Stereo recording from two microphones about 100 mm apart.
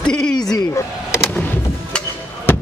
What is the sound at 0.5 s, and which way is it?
Speech, 30° left (ahead or behind).